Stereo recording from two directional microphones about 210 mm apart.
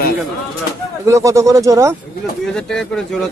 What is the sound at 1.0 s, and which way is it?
Speech, 15° right (ahead or behind).